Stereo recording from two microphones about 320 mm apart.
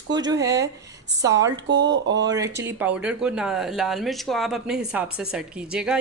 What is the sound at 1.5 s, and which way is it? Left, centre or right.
Speech, right.